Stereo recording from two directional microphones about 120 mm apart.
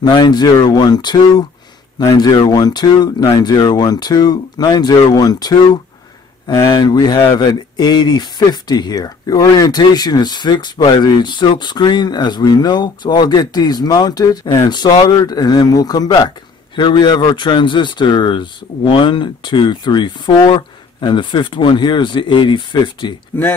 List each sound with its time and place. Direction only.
0.0 s speech: 35° left (ahead or behind)
23.3 s speech: 15° left (ahead or behind)